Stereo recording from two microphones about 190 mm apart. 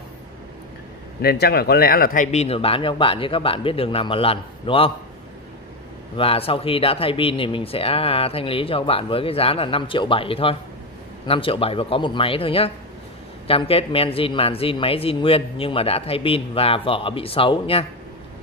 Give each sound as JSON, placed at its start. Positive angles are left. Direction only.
{"t": 1.2, "sound": "speech", "side_deg": 55}
{"t": 2.3, "sound": "speech", "side_deg": 30}
{"t": 6.1, "sound": "speech", "side_deg": 30}